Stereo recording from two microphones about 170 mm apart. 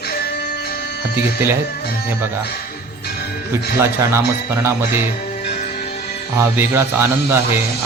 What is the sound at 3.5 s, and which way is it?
Speech, 15° right (ahead or behind).